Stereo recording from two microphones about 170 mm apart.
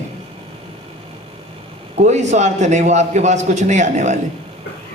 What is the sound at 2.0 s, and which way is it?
A man's voice, 40° right (ahead or behind).